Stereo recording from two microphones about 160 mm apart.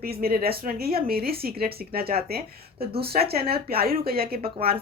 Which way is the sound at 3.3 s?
75° right (ahead or behind).